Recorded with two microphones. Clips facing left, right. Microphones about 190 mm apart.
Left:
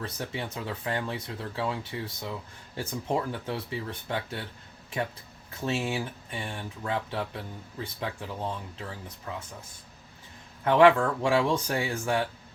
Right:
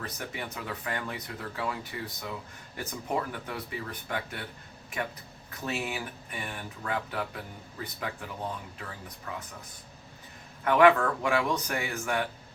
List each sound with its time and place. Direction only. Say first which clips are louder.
0.0 s speech: left 3 dB; 30° left (ahead or behind)
5.5 s speech: left 4 dB; 25° left (ahead or behind)
10.6 s speech: left 2 dB; 30° left (ahead or behind)